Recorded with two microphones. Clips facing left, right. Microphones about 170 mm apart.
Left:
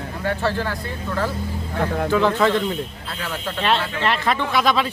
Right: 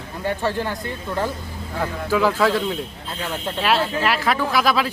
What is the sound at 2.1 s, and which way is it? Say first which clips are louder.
Speech: right 1 dB; 5° right (ahead or behind).